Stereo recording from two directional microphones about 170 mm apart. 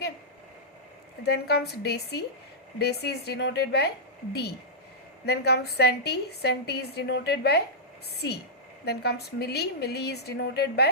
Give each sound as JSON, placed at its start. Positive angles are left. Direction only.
{"t": 1.2, "sound": "a woman's voice", "side_deg": 70}
{"t": 8.8, "sound": "a woman's voice", "side_deg": 75}